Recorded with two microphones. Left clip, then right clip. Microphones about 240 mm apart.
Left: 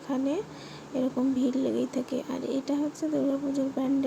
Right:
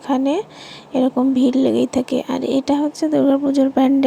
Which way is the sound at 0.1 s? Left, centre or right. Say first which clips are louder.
Right 11 dB; right.